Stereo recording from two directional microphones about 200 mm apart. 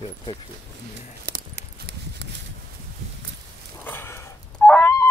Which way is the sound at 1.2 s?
50° right (ahead or behind).